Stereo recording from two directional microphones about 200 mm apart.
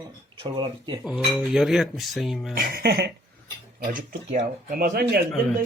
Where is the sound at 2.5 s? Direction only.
50° right (ahead or behind).